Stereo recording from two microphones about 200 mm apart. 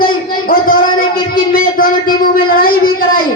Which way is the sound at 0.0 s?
45° left (ahead or behind).